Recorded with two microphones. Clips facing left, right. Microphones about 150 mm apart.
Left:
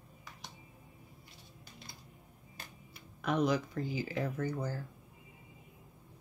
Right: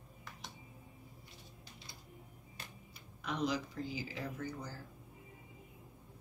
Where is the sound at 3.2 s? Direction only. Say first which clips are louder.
Left 6 dB; 55° left (ahead or behind).